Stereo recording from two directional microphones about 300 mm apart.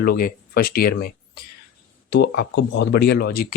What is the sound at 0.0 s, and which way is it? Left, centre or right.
Speech, left.